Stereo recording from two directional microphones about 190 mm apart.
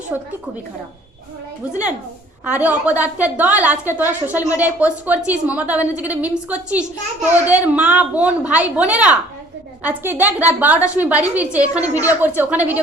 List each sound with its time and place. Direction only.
0.1 s a woman's voice: 10° right (ahead or behind)
2.4 s a woman's voice: 10° right (ahead or behind)
10.8 s a woman's voice: 15° left (ahead or behind)
11.5 s a woman's voice: 5° right (ahead or behind)